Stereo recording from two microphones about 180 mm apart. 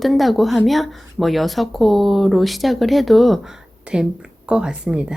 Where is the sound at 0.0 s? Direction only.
Centre (ahead or behind).